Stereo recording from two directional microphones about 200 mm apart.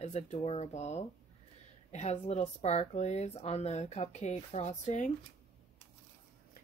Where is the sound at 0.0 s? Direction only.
35° left (ahead or behind).